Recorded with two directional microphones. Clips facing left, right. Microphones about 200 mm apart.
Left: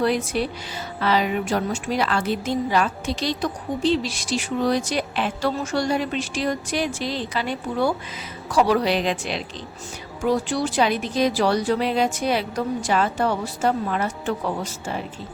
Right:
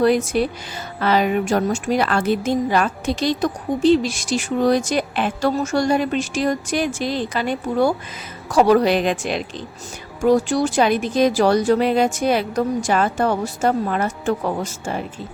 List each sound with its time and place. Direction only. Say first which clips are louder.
0.0 s a woman's voice: right 5 dB; 45° right (ahead or behind)